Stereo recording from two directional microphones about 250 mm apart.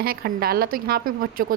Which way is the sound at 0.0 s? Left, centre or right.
Right.